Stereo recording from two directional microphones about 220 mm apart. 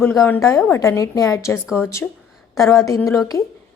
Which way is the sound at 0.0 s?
5° left (ahead or behind).